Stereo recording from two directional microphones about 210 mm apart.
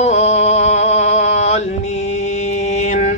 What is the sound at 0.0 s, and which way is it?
Mantra, 30° left (ahead or behind).